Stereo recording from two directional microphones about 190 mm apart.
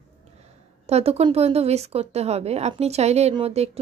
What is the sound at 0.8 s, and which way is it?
Speech, 35° right (ahead or behind).